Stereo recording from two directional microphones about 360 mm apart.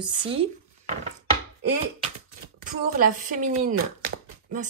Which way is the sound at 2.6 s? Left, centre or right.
Right.